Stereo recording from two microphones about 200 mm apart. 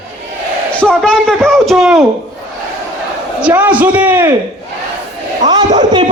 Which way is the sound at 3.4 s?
5° right (ahead or behind).